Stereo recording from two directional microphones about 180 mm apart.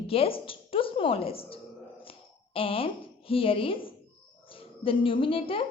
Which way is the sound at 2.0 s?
30° left (ahead or behind).